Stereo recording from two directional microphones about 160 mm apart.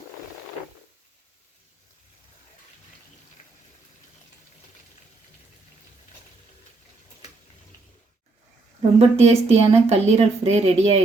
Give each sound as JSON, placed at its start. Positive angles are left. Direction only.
{"t": 9.0, "sound": "speech", "side_deg": -40}